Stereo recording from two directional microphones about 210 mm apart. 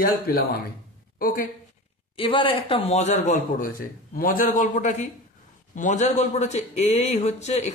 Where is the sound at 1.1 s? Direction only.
45° left (ahead or behind).